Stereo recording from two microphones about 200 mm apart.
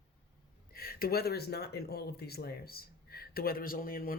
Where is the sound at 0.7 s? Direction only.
50° left (ahead or behind).